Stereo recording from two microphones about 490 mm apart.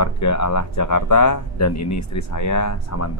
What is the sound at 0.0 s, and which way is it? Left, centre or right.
A man's voice, left.